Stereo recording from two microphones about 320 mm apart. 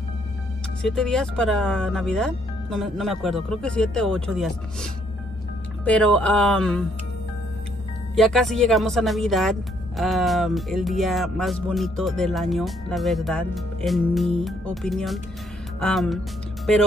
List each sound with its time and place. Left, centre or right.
0.8 s speech: centre
5.9 s speech: centre
8.2 s speech: centre